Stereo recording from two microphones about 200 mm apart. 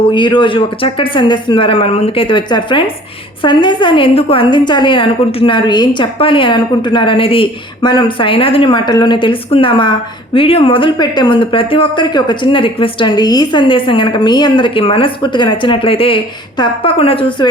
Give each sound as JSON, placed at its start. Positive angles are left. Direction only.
{"t": 0.1, "sound": "speech", "side_deg": 25}